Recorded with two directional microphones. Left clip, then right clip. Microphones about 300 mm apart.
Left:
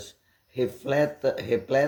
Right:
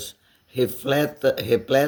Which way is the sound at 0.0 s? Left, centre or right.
Right.